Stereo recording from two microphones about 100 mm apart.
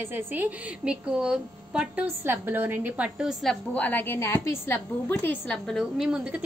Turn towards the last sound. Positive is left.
turn(degrees=0)  # may be behind; listen again after turning